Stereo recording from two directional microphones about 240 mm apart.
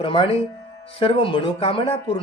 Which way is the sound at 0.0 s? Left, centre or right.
Left.